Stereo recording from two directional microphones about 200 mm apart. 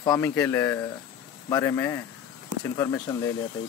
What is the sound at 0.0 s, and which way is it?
Speech, 15° left (ahead or behind).